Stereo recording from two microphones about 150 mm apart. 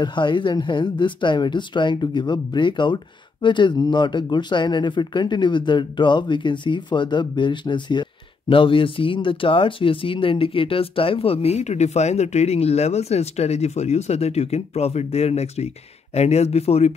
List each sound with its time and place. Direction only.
0.0 s speech: 30° left (ahead or behind)